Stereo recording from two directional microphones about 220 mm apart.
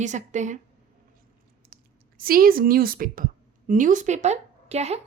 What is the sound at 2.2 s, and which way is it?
A woman's voice, 40° right (ahead or behind).